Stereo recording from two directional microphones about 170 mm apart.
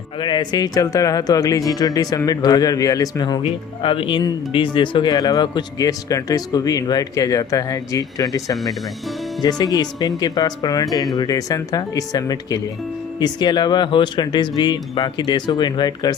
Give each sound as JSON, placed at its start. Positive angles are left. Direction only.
{"t": 0.2, "sound": "speech", "side_deg": 25}